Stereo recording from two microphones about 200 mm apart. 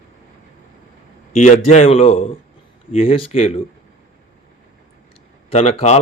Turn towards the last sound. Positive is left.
turn(degrees=35)  # may be behind; listen again after turning